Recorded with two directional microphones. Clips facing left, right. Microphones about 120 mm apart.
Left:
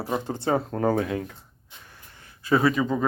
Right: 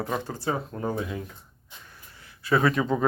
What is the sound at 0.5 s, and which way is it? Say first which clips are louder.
Speech: left 7 dB; 60° left (ahead or behind).